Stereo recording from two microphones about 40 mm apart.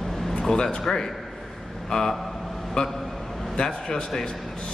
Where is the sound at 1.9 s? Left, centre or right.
Centre.